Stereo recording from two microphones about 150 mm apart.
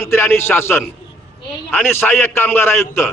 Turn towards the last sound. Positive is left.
turn(degrees=15)  # may be behind; listen again after turning